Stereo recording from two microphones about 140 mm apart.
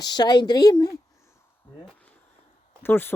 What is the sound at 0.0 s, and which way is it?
Speech, 30° left (ahead or behind).